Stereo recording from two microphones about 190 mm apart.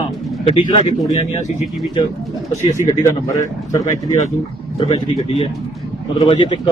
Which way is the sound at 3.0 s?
15° left (ahead or behind).